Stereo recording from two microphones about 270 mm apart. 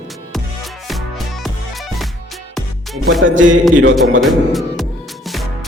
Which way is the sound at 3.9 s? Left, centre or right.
Centre.